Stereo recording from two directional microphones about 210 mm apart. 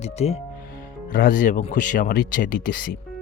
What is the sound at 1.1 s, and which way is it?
Speech, 45° left (ahead or behind).